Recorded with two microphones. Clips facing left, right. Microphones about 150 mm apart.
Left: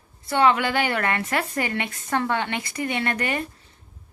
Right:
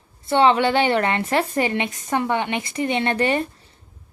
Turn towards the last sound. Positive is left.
turn(degrees=-30)  # may be behind; listen again after turning